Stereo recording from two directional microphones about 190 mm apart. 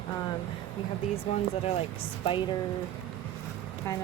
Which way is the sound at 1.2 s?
30° left (ahead or behind).